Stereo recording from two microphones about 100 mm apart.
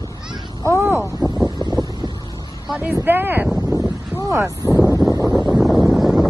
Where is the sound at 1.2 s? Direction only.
5° right (ahead or behind).